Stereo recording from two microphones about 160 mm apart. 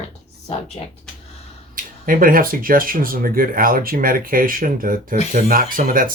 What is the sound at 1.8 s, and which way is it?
Speech, 60° right (ahead or behind).